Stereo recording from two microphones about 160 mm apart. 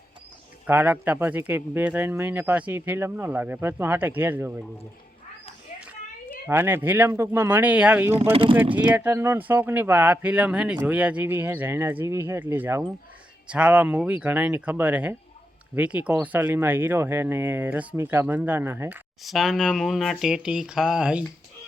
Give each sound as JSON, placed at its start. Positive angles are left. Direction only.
{"t": 0.7, "sound": "speech", "side_deg": -10}
{"t": 6.5, "sound": "speech", "side_deg": -15}
{"t": 8.3, "sound": "speech", "side_deg": -35}
{"t": 8.9, "sound": "speech", "side_deg": -10}
{"t": 19.2, "sound": "speech", "side_deg": 0}